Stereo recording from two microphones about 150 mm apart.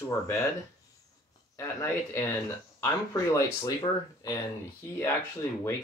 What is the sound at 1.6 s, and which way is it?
Speech, 20° left (ahead or behind).